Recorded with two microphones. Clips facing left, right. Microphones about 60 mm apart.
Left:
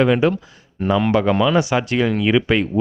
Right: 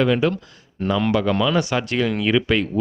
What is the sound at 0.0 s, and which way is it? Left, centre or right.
Speech, centre.